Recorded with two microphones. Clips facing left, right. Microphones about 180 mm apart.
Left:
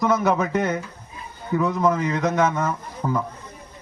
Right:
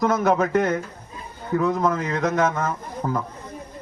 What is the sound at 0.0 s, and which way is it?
A man's voice, 50° right (ahead or behind).